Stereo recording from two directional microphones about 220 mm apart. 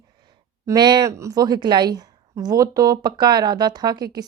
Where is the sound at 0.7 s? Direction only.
20° right (ahead or behind).